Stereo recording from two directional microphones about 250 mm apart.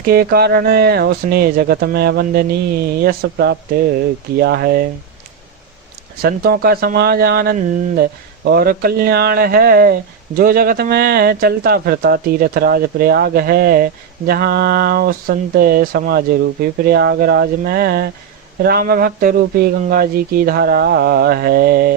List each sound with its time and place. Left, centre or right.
0.0 s speech: right
6.2 s speech: right